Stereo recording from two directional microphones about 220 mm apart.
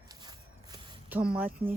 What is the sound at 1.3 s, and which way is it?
Speech, 5° right (ahead or behind).